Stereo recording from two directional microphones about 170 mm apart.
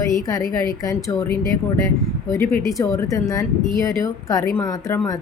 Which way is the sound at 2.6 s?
20° left (ahead or behind).